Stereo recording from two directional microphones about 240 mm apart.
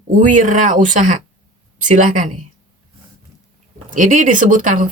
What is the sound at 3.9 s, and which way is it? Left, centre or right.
A woman's voice, right.